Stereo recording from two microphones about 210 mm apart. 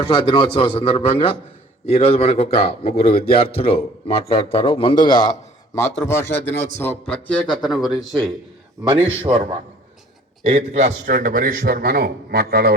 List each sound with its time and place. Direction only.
0.0 s a man's voice: 20° left (ahead or behind)
7.0 s a man's voice: 25° left (ahead or behind)
7.7 s speech: centre (ahead or behind)
8.9 s a man's voice: 25° right (ahead or behind); by 12.7 s 45° right (ahead or behind)